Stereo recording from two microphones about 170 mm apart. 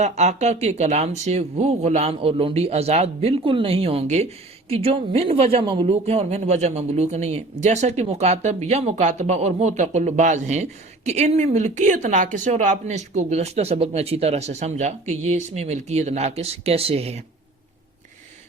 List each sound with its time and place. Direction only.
0.0 s speech: 40° right (ahead or behind)